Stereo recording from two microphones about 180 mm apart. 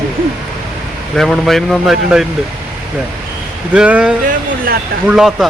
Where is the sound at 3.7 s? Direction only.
5° right (ahead or behind).